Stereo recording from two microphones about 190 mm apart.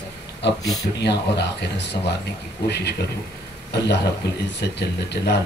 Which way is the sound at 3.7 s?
60° left (ahead or behind).